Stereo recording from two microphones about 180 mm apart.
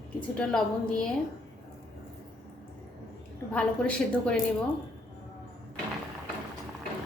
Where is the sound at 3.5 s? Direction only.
5° left (ahead or behind).